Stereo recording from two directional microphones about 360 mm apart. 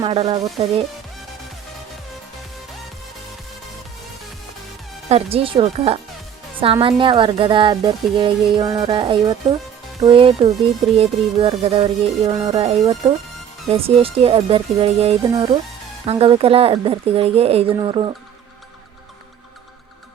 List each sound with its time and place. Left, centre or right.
0.0 s speech: centre
5.0 s speech: centre